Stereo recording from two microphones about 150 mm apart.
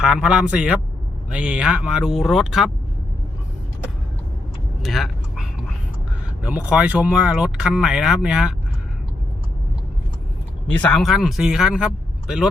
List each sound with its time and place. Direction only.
0.0 s speech: 5° right (ahead or behind)
4.8 s vehicle: centre (ahead or behind)
6.4 s speech: 10° right (ahead or behind)
10.7 s speech: 10° left (ahead or behind)
11.0 s speech: centre (ahead or behind)